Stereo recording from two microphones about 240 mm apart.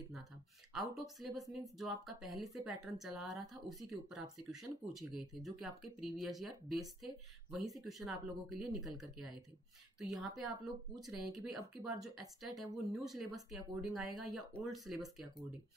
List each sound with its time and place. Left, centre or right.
0.7 s speech: centre